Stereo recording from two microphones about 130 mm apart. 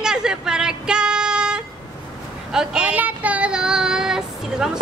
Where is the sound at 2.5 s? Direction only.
5° right (ahead or behind).